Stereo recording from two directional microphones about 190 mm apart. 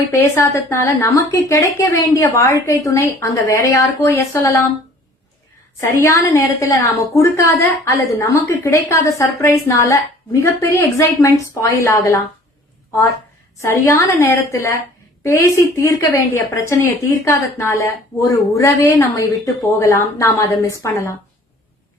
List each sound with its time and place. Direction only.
0.2 s a woman's voice: 15° left (ahead or behind)
5.8 s a woman's voice: 15° left (ahead or behind)
13.6 s a woman's voice: 15° left (ahead or behind)